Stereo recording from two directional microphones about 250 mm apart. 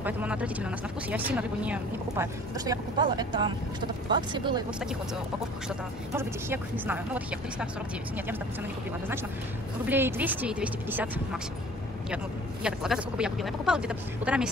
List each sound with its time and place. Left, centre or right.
0.0 s speech: centre
6.1 s speech: centre
9.8 s speech: centre
12.6 s speech: centre